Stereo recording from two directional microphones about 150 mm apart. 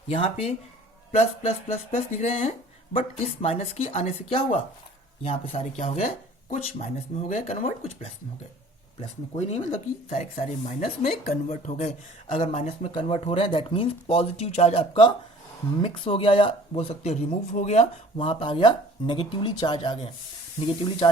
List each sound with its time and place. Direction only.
0.1 s speech: 45° left (ahead or behind)
7.4 s speech: 45° left (ahead or behind)
9.4 s speech: 50° left (ahead or behind); by 20.0 s 30° left (ahead or behind)
21.0 s speech: 40° left (ahead or behind)